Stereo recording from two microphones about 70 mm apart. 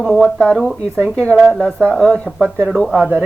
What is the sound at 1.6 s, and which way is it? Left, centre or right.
Speech, centre.